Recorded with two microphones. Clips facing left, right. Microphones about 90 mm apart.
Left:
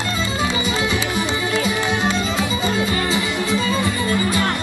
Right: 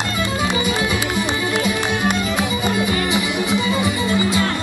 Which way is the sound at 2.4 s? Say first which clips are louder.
Right 1 dB; 15° right (ahead or behind).